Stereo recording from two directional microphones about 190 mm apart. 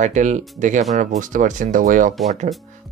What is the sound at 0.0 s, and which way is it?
Speech, 40° right (ahead or behind).